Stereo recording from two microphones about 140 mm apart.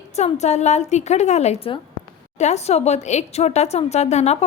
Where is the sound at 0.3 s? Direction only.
55° left (ahead or behind).